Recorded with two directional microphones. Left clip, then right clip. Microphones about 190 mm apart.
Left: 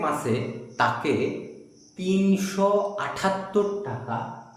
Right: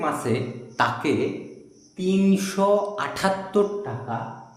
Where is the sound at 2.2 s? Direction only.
30° right (ahead or behind).